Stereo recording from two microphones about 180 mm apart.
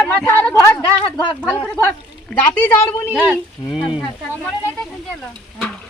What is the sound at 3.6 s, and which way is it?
Speech, 25° left (ahead or behind).